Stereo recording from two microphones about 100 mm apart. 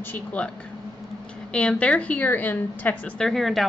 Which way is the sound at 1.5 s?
10° left (ahead or behind).